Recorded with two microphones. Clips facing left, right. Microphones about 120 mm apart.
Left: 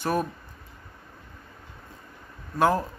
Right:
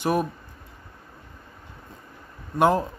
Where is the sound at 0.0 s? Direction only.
15° right (ahead or behind).